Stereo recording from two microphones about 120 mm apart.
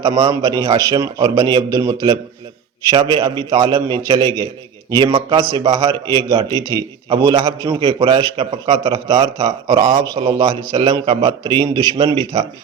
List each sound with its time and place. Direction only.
0.0 s a man's voice: 40° right (ahead or behind)
7.2 s a man's voice: 30° right (ahead or behind)
7.7 s a man's voice: 45° right (ahead or behind)
11.9 s a man's voice: 50° right (ahead or behind)